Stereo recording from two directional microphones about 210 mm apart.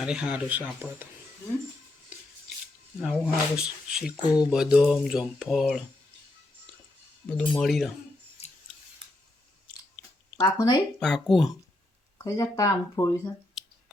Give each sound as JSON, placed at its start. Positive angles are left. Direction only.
{"t": 0.0, "sound": "speech", "side_deg": -5}
{"t": 3.0, "sound": "speech", "side_deg": -5}
{"t": 7.3, "sound": "speech", "side_deg": 5}
{"t": 8.4, "sound": "scissors", "side_deg": 30}
{"t": 10.3, "sound": "speech", "side_deg": 20}
{"t": 11.0, "sound": "speech", "side_deg": 0}
{"t": 12.2, "sound": "speech", "side_deg": 15}